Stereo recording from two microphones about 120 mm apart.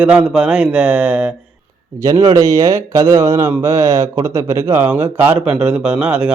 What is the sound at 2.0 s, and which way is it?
A man's voice, 25° right (ahead or behind).